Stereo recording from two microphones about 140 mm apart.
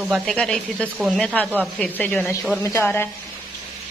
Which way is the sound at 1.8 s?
10° left (ahead or behind).